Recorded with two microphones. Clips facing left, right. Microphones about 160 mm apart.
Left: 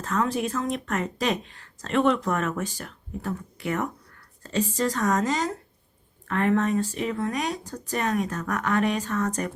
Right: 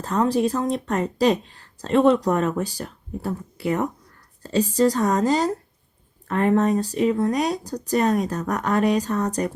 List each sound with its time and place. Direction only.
0.0 s speech: 35° right (ahead or behind)